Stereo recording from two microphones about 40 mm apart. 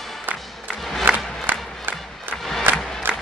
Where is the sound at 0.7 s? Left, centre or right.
Centre.